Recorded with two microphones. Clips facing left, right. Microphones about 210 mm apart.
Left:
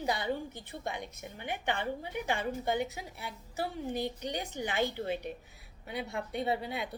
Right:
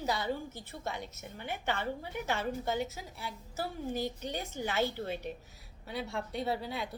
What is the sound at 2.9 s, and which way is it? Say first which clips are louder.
Speech: even; 60° left (ahead or behind).